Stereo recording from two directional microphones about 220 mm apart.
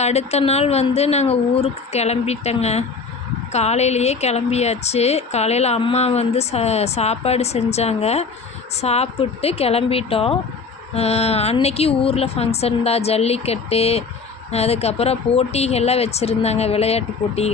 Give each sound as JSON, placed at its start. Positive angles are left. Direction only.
{"t": 0.0, "sound": "speech", "side_deg": 30}